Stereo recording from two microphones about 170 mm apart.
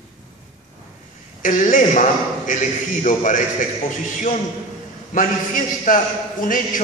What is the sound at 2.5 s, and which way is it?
Speech, 50° left (ahead or behind).